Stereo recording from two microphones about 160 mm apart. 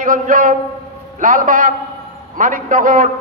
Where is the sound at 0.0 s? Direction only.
55° right (ahead or behind).